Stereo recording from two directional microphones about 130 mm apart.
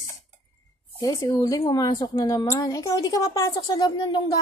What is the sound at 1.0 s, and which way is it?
A woman's voice, 25° left (ahead or behind).